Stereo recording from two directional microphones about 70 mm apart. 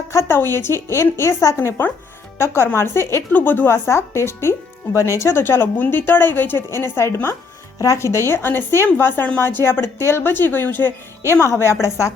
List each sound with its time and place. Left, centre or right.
0.1 s a woman's voice: left
3.3 s speech: left
3.8 s a woman's voice: left
5.4 s a woman's voice: left
11.4 s a woman's voice: left